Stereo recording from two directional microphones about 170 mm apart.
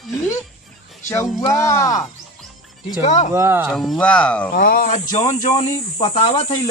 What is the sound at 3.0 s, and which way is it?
Speech, 45° left (ahead or behind).